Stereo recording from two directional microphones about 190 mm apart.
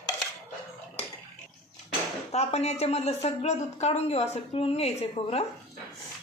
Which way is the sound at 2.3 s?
35° left (ahead or behind).